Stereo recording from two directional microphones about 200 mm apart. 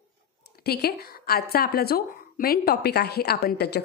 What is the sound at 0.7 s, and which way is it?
A woman's voice, 50° left (ahead or behind).